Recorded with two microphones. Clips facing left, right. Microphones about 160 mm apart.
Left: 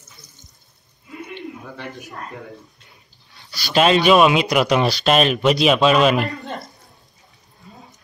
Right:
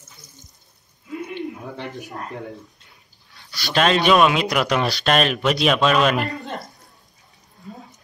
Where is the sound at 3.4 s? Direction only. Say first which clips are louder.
Left 3 dB; centre (ahead or behind).